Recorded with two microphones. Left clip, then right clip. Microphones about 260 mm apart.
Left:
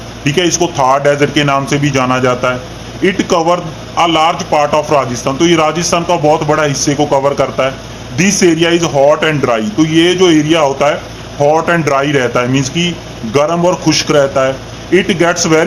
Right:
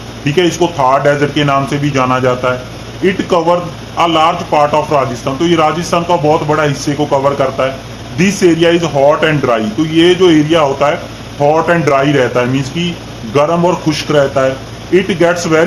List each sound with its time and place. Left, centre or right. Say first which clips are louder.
0.3 s a man's voice: even; left